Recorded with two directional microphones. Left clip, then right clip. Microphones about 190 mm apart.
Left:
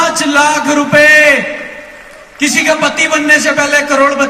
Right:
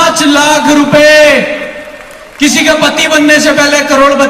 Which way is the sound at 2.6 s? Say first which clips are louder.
Right 2 dB; 15° left (ahead or behind).